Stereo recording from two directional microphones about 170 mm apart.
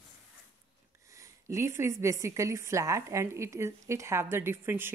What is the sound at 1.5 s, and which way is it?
A woman's voice, 15° right (ahead or behind).